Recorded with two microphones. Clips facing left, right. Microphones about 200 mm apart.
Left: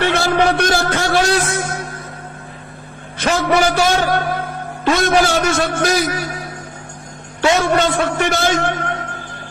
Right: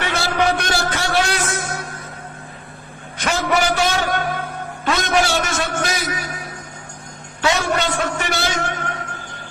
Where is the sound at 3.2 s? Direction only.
40° left (ahead or behind).